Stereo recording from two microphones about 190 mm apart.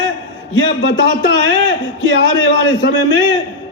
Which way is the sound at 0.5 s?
90° left.